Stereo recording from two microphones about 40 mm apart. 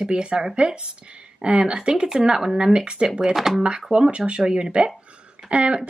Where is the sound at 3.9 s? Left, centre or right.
Right.